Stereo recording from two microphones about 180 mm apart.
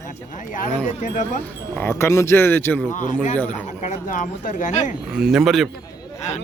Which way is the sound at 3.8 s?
45° left (ahead or behind).